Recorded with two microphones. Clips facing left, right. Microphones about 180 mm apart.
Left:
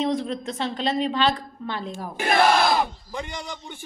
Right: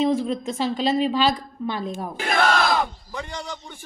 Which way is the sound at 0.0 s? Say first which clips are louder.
Right 3 dB; 5° right (ahead or behind).